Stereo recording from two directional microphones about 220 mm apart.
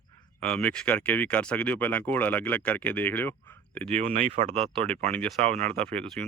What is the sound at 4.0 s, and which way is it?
Speech, 30° right (ahead or behind).